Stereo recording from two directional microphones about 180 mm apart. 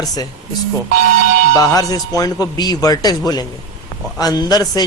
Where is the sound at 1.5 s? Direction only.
20° left (ahead or behind).